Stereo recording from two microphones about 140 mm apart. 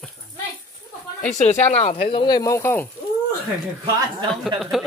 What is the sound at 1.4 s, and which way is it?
Speech, 55° left (ahead or behind).